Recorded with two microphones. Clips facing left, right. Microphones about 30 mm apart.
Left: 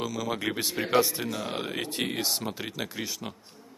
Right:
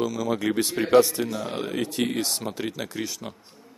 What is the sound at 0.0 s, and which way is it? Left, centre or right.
Speech, centre.